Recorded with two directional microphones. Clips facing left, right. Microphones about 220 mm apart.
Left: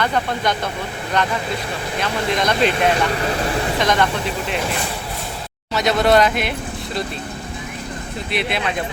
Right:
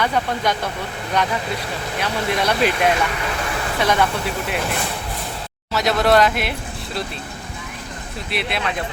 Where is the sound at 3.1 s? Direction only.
35° left (ahead or behind).